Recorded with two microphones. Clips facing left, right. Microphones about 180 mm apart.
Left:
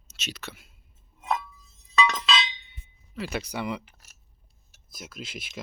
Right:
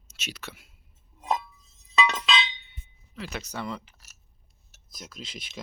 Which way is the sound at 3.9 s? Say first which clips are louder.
Left 1 dB; 55° left (ahead or behind).